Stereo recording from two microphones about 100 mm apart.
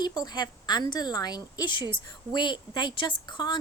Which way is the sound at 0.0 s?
45° left (ahead or behind).